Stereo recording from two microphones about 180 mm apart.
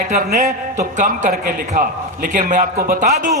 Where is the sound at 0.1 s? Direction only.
40° right (ahead or behind).